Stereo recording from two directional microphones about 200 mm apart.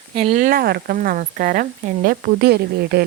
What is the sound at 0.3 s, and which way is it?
A woman's voice, 45° right (ahead or behind).